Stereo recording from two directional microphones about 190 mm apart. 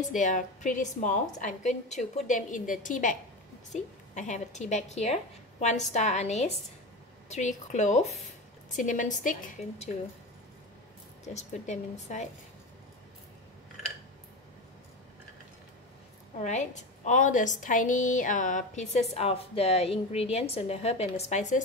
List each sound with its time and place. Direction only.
0.1 s a woman's voice: 40° left (ahead or behind)
11.2 s a woman's voice: 35° left (ahead or behind)
16.3 s a woman's voice: 35° left (ahead or behind)